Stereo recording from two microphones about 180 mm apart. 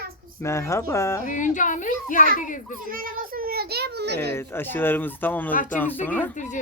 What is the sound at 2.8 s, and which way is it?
A child's voice, 50° right (ahead or behind).